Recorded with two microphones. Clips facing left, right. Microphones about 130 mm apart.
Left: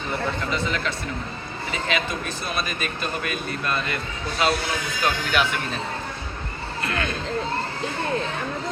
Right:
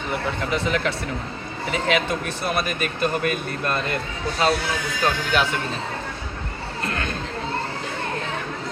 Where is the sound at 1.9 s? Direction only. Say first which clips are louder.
Right 4 dB; 60° right (ahead or behind).